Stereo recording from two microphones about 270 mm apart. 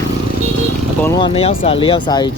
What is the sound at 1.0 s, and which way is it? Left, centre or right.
Speech, centre.